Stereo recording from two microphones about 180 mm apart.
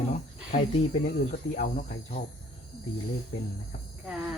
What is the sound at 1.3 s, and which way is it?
Speech, 50° left (ahead or behind).